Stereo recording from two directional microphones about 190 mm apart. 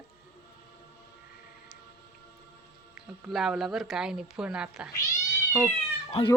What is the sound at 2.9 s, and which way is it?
A woman's voice, centre (ahead or behind).